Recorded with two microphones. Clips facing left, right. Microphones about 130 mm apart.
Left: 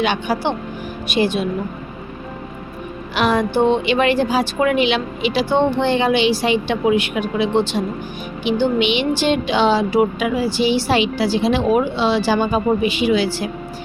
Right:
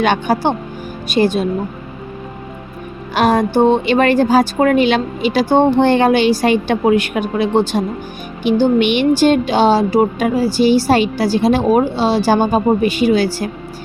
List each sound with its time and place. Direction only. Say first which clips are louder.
0.0 s speech: right 4 dB; 45° right (ahead or behind)
3.2 s speech: right 4 dB; 45° right (ahead or behind)